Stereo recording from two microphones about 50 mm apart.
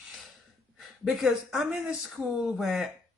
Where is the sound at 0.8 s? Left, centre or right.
Centre.